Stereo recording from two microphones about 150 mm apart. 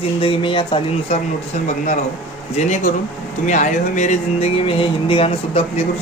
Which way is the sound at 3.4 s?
55° left (ahead or behind).